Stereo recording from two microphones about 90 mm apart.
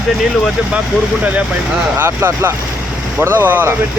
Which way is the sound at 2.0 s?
25° right (ahead or behind).